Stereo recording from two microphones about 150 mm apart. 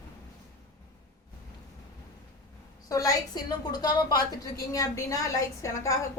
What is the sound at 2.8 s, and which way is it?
A woman's voice, 25° left (ahead or behind).